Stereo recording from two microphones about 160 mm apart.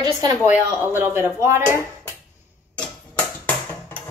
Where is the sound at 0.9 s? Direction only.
15° right (ahead or behind).